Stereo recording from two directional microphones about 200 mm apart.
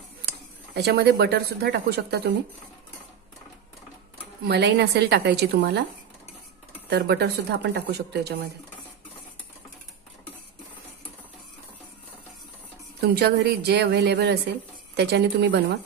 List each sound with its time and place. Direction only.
0.2 s speech: 55° right (ahead or behind)
4.5 s speech: 55° right (ahead or behind)
6.9 s speech: 55° right (ahead or behind)
13.0 s speech: 55° right (ahead or behind)